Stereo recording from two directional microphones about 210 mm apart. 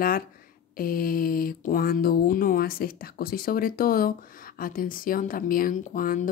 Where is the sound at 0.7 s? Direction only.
45° left (ahead or behind).